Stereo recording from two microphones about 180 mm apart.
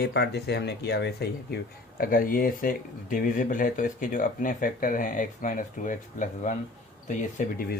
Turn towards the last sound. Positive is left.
turn(degrees=50)  # may be behind; listen again after turning